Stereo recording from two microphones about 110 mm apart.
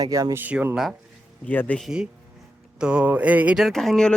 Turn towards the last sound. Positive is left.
turn(degrees=5)  # may be behind; listen again after turning